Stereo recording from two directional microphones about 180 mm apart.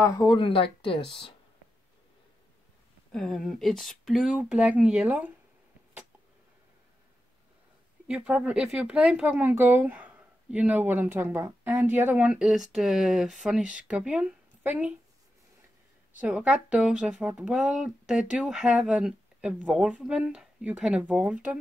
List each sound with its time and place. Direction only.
0.0 s speech: 20° left (ahead or behind)
3.1 s speech: 5° left (ahead or behind)
8.1 s speech: 5° right (ahead or behind)
16.1 s speech: 10° right (ahead or behind)